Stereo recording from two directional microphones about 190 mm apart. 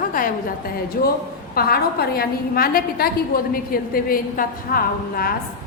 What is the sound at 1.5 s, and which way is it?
A woman's voice, 55° left (ahead or behind).